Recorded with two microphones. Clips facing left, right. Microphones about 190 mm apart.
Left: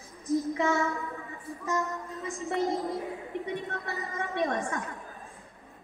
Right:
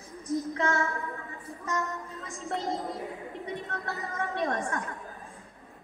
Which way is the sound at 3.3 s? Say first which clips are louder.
Left 4 dB; 20° left (ahead or behind).